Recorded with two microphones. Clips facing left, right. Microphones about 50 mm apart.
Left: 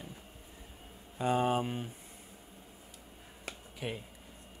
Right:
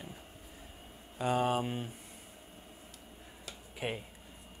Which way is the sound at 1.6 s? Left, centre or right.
Centre.